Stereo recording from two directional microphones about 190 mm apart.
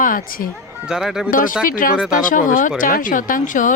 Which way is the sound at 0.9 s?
Centre (ahead or behind).